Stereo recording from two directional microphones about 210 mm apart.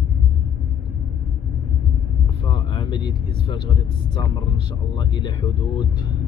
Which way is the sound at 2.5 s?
20° left (ahead or behind).